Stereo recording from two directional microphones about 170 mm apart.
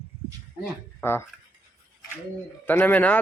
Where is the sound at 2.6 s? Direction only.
10° left (ahead or behind).